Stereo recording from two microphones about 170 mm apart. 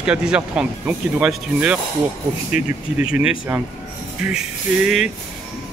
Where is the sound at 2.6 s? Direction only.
45° left (ahead or behind).